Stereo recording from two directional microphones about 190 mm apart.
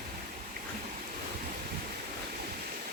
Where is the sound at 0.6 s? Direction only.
55° right (ahead or behind).